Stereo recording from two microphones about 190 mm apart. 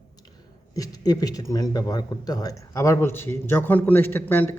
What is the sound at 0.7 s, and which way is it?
Speech, 20° left (ahead or behind).